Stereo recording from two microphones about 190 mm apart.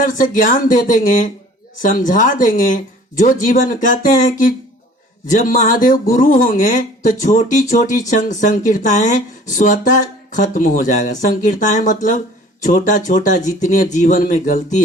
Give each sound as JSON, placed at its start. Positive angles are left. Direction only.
{"t": 0.0, "sound": "speech", "side_deg": 45}